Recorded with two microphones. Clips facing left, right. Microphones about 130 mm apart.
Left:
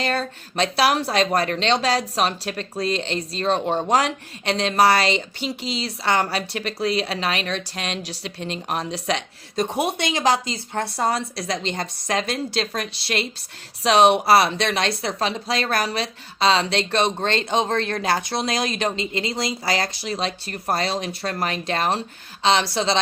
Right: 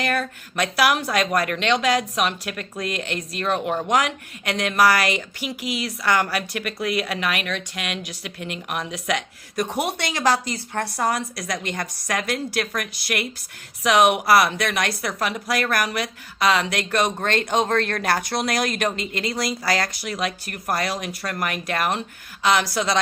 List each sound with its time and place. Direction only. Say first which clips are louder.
0.0 s a woman's voice: even; 30° left (ahead or behind)